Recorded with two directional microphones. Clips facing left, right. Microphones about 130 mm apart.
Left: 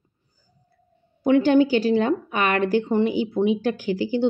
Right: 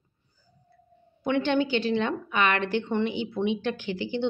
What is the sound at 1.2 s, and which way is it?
A woman's voice, 35° left (ahead or behind).